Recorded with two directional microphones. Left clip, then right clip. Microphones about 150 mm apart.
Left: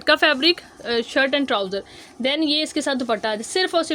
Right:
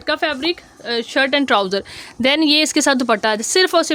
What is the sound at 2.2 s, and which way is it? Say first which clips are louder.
Speech: right 6 dB; 45° right (ahead or behind).